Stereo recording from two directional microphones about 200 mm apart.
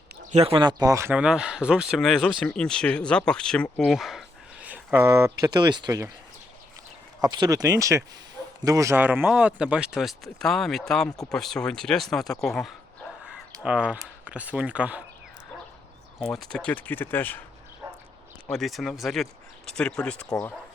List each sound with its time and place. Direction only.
0.3 s speech: 30° right (ahead or behind)
7.2 s speech: 20° right (ahead or behind)
16.1 s speech: centre (ahead or behind)
18.4 s speech: centre (ahead or behind)